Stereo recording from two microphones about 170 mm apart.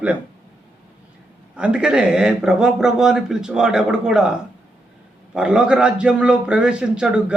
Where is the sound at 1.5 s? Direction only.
5° right (ahead or behind).